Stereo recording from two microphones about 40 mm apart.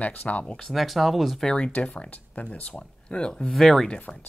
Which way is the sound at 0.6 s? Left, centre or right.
Centre.